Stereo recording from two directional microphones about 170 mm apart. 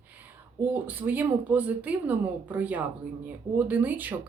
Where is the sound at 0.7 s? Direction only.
10° right (ahead or behind).